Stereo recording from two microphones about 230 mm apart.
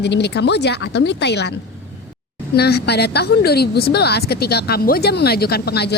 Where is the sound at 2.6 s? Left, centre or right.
Left.